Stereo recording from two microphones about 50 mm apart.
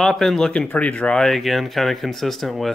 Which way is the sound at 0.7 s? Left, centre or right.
Left.